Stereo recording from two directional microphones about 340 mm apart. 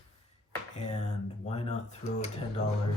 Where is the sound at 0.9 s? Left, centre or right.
Centre.